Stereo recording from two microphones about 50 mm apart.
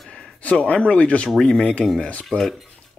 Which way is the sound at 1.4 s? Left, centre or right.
Centre.